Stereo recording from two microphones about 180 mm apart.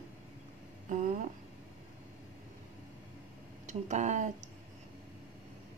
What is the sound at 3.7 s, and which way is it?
Speech, 40° right (ahead or behind).